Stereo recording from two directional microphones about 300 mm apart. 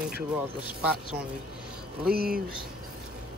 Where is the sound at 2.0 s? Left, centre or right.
Right.